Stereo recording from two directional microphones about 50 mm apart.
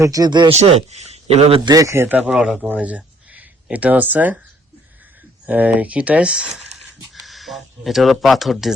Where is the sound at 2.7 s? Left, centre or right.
Right.